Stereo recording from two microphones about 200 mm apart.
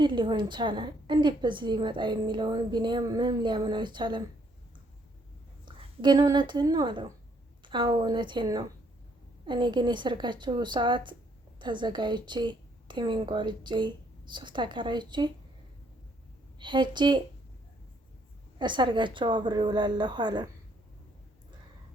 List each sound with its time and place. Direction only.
0.0 s a woman's voice: 25° right (ahead or behind)
5.6 s a woman's voice: 20° right (ahead or behind)
16.6 s a woman's voice: 25° right (ahead or behind)
18.6 s a woman's voice: 25° right (ahead or behind)